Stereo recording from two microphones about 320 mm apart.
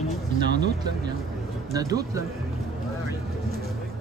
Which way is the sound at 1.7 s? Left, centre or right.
Centre.